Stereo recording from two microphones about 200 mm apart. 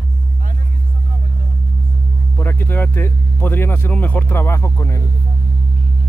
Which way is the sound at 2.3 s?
10° left (ahead or behind).